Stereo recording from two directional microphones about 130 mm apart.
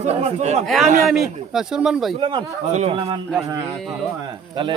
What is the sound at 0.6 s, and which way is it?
Speech, centre (ahead or behind).